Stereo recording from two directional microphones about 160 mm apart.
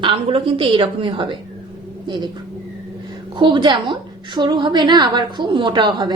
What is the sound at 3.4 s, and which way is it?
A woman's voice, 30° right (ahead or behind).